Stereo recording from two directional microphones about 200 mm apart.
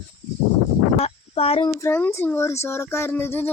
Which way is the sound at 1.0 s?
30° left (ahead or behind).